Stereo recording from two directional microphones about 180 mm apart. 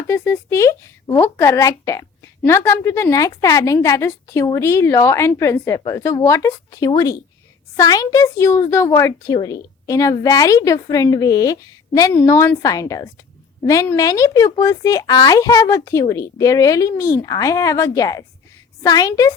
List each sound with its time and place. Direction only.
0.1 s a woman's voice: 15° left (ahead or behind)